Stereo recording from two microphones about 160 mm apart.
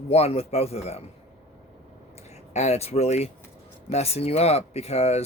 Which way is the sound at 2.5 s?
45° left (ahead or behind).